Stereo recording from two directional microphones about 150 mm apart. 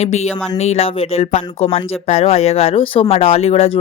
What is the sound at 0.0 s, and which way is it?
Speech, 45° left (ahead or behind).